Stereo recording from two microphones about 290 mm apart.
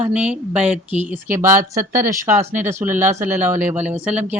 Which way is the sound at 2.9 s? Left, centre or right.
Right.